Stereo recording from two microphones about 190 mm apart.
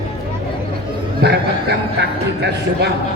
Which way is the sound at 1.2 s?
60° right (ahead or behind).